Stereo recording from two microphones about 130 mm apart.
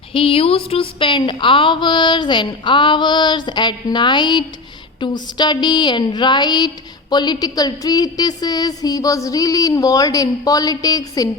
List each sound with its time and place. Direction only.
0.1 s a woman's voice: 45° left (ahead or behind); by 11.3 s 30° left (ahead or behind)